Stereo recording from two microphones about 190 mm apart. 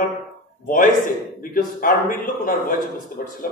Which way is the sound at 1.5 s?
45° left (ahead or behind).